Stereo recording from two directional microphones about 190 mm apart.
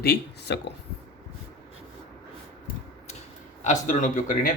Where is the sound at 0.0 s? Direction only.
60° left (ahead or behind).